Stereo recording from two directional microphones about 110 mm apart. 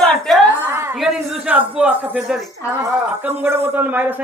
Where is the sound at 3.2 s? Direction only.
20° right (ahead or behind).